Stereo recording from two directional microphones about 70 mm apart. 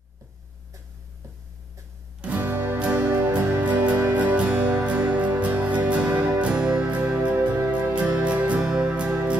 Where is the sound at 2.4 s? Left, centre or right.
Right.